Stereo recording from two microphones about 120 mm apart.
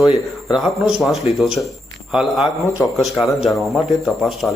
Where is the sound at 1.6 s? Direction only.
20° left (ahead or behind).